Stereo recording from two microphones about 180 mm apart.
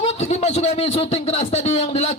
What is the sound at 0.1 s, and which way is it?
A man's voice, 35° left (ahead or behind).